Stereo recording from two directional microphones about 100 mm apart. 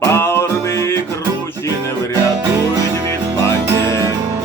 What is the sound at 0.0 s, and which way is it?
Music, 25° left (ahead or behind).